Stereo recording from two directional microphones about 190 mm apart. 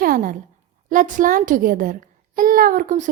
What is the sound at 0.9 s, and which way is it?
A woman's voice, 40° right (ahead or behind).